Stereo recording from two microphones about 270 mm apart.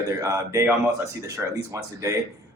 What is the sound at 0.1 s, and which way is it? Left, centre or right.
A man's voice, centre.